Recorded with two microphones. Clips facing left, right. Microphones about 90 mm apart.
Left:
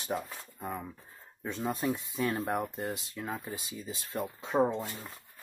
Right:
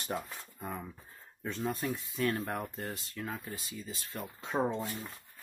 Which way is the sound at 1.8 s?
20° left (ahead or behind).